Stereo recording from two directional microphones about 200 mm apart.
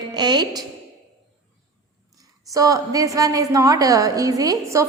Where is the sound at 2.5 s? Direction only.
15° right (ahead or behind).